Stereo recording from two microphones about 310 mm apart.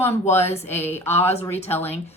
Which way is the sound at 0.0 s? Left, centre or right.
Centre.